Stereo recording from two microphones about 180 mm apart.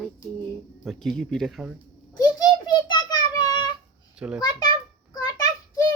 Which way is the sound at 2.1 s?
20° left (ahead or behind).